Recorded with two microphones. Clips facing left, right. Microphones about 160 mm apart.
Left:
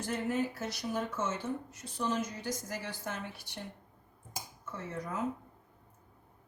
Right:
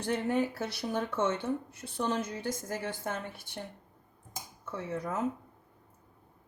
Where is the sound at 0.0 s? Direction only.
65° right (ahead or behind).